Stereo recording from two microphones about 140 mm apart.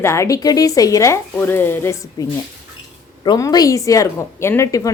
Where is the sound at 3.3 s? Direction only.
25° left (ahead or behind).